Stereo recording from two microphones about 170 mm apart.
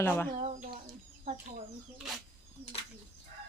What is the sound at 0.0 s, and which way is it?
Speech, 10° left (ahead or behind).